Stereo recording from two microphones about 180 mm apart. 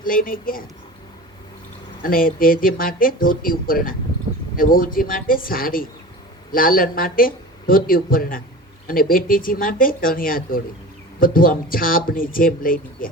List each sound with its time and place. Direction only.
0.0 s speech: 50° left (ahead or behind)
2.0 s speech: 50° left (ahead or behind)